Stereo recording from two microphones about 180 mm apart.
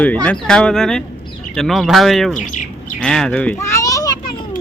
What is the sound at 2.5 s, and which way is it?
Bird, 45° left (ahead or behind).